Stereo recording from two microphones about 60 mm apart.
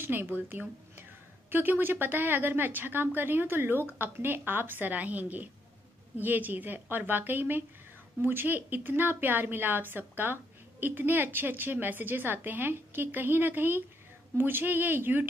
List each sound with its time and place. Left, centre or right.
0.0 s a woman's voice: right